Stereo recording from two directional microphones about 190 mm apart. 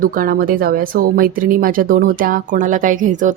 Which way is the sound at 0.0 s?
45° right (ahead or behind).